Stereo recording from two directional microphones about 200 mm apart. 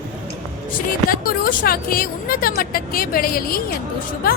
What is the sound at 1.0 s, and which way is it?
A woman's voice, 45° left (ahead or behind).